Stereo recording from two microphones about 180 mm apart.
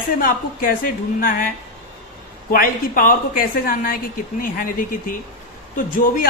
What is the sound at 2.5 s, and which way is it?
A woman's voice, 50° left (ahead or behind).